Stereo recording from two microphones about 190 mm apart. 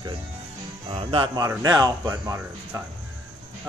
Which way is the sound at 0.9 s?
25° right (ahead or behind).